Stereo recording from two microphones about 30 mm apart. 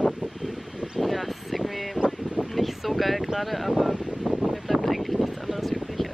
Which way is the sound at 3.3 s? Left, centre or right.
Centre.